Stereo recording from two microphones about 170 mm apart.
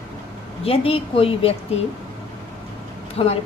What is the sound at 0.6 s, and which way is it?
Speech, 35° left (ahead or behind).